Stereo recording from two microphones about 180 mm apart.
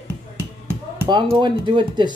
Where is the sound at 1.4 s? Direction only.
25° right (ahead or behind).